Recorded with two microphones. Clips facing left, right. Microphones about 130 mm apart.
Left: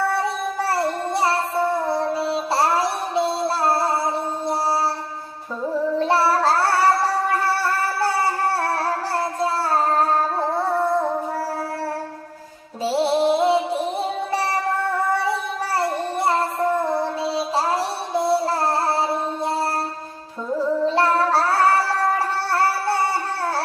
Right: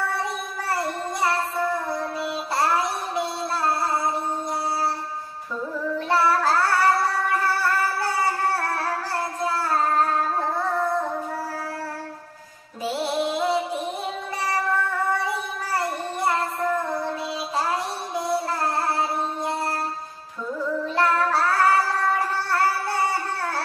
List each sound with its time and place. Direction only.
0.2 s child singing: 30° left (ahead or behind)
7.6 s music: 30° left (ahead or behind)
9.4 s child singing: 30° left (ahead or behind)
12.8 s music: 30° left (ahead or behind)
15.2 s child singing: 30° left (ahead or behind)
20.5 s music: 30° left (ahead or behind)